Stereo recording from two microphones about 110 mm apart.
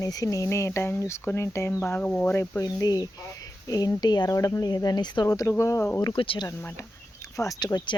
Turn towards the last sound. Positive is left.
turn(degrees=40)  # may be behind; listen again after turning